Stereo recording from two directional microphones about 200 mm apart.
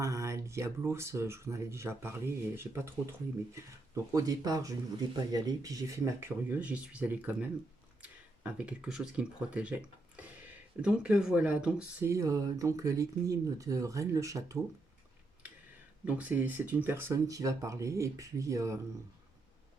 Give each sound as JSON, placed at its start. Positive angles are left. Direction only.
{"t": 0.0, "sound": "speech", "side_deg": -15}
{"t": 4.1, "sound": "speech", "side_deg": -20}
{"t": 16.0, "sound": "speech", "side_deg": -5}